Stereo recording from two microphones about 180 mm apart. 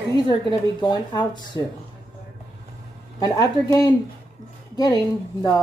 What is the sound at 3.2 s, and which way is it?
Speech, 20° left (ahead or behind).